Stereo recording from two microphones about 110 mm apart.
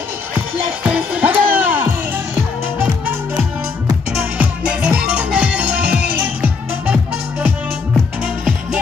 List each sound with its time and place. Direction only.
0.8 s music: 10° right (ahead or behind)
4.1 s music: 10° right (ahead or behind)